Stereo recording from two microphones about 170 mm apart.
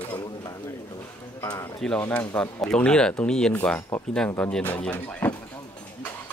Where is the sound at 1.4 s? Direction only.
25° left (ahead or behind).